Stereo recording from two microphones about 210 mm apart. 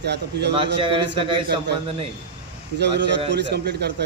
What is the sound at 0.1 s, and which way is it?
Speech, 55° right (ahead or behind).